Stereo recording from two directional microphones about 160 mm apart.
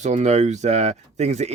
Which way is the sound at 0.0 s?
45° right (ahead or behind).